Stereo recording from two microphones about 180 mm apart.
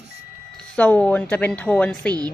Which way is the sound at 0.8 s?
10° left (ahead or behind).